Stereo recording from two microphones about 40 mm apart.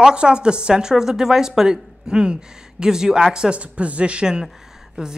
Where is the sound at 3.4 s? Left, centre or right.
Right.